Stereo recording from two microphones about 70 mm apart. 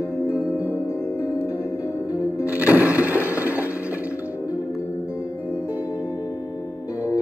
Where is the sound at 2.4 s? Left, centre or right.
Right.